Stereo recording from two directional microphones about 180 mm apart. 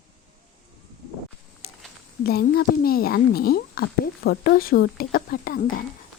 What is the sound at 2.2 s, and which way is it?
Speech, 60° left (ahead or behind).